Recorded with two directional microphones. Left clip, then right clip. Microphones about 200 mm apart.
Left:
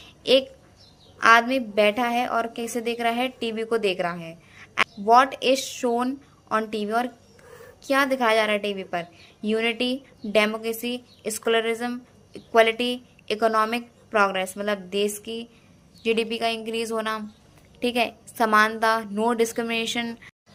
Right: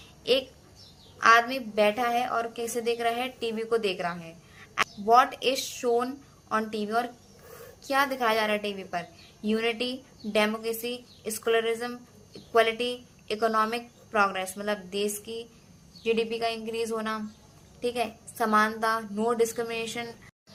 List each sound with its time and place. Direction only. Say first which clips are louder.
0.2 s a woman's voice: left 6 dB; 40° left (ahead or behind)